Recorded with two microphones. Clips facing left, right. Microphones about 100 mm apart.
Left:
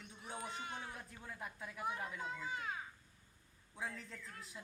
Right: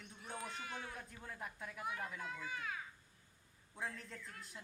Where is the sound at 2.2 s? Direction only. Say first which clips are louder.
Left 2 dB; 20° left (ahead or behind).